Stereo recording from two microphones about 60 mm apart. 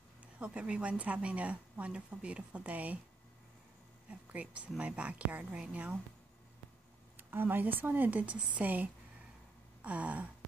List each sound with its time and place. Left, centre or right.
0.2 s a woman's voice: centre
4.1 s a woman's voice: right
7.2 s speech: right
9.8 s gasp: right